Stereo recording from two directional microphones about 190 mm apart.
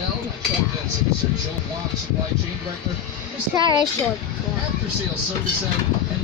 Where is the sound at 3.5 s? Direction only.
25° right (ahead or behind).